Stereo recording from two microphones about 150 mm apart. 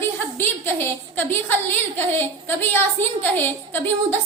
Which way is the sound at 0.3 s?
15° left (ahead or behind).